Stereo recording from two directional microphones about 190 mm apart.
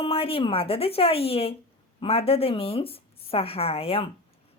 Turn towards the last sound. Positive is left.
turn(degrees=30)  # may be behind; listen again after turning